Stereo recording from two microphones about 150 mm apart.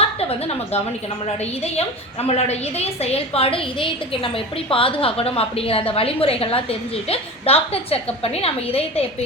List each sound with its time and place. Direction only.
0.0 s a woman's voice: 40° left (ahead or behind)